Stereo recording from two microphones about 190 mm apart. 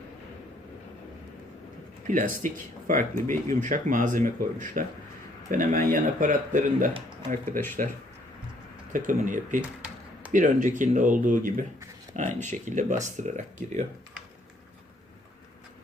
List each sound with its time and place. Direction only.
2.0 s speech: 45° right (ahead or behind)
8.9 s speech: 45° right (ahead or behind)
9.6 s tap: 5° right (ahead or behind)
10.3 s speech: 40° right (ahead or behind)